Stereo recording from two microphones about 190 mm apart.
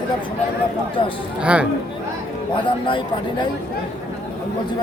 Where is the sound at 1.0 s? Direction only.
25° left (ahead or behind).